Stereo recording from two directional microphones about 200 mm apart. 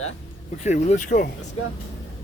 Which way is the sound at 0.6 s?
35° left (ahead or behind).